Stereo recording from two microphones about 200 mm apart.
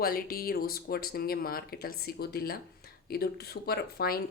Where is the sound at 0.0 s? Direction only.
50° left (ahead or behind).